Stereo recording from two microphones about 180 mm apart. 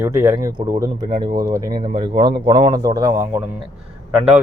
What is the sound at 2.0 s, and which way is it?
Speech, 25° right (ahead or behind).